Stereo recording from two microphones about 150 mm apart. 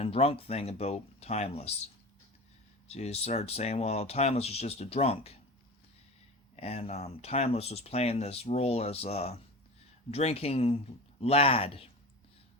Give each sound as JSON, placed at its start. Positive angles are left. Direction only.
{"t": 0.0, "sound": "speech", "side_deg": 40}
{"t": 6.6, "sound": "speech", "side_deg": 45}